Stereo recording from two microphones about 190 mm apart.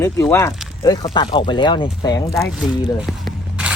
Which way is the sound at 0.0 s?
15° left (ahead or behind).